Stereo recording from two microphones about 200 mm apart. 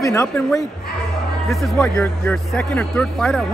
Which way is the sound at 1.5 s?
Centre (ahead or behind).